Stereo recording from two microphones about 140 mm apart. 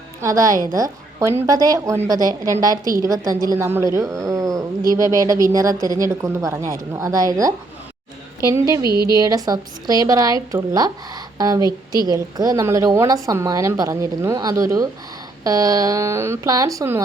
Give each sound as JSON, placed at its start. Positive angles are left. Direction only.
{"t": 0.2, "sound": "a woman's voice", "side_deg": -25}